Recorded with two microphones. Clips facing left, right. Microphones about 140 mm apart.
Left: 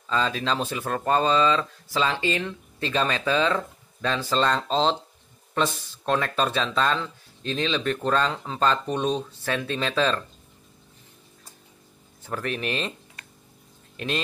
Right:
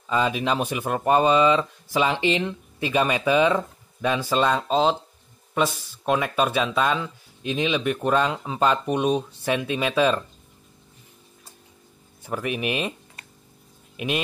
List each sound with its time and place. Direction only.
0.0 s speech: 15° right (ahead or behind)
12.2 s speech: 10° right (ahead or behind)
13.9 s speech: 15° right (ahead or behind)